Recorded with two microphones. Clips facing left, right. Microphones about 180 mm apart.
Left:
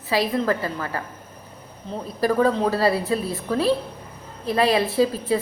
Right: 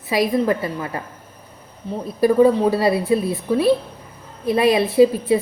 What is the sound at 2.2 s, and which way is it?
A woman's voice, 15° right (ahead or behind).